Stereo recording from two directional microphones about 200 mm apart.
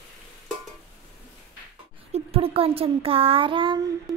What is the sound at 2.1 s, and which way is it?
A child's voice, 30° right (ahead or behind).